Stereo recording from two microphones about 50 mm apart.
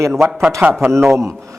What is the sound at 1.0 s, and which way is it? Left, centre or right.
Speech, right.